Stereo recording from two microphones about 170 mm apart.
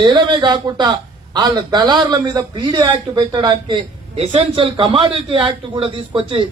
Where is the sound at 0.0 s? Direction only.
30° right (ahead or behind).